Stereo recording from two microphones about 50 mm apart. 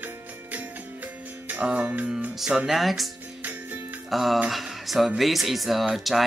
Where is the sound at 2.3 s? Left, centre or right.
Centre.